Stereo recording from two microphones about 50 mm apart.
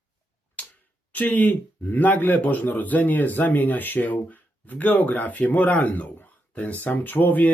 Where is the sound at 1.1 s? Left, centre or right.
Left.